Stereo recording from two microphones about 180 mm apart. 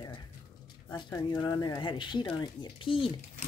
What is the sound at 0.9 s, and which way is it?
Speech, 25° left (ahead or behind).